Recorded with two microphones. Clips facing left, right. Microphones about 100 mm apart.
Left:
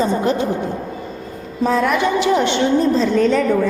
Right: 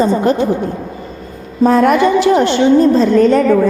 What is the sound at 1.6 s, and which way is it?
A woman's voice, 50° right (ahead or behind).